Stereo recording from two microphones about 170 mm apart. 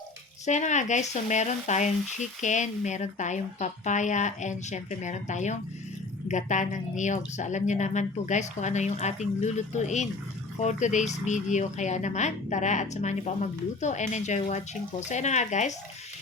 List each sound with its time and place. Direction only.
0.4 s speech: 45° left (ahead or behind)